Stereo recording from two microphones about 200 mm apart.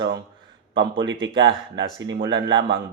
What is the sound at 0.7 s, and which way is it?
A man's voice, 70° right (ahead or behind).